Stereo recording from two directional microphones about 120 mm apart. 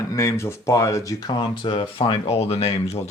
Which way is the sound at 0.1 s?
25° left (ahead or behind).